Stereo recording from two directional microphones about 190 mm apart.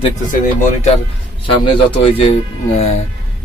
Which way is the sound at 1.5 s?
25° left (ahead or behind).